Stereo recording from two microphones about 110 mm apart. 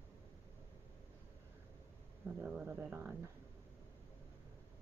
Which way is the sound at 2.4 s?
10° right (ahead or behind).